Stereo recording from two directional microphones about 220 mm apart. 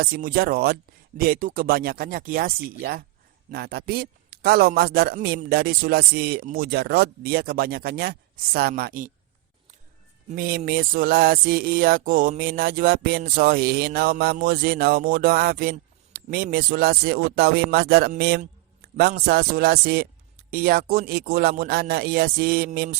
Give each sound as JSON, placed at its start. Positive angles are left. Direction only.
{"t": 0.0, "sound": "music", "side_deg": -40}
{"t": 1.2, "sound": "speech", "side_deg": -40}
{"t": 3.5, "sound": "music", "side_deg": -45}
{"t": 10.2, "sound": "music", "side_deg": -40}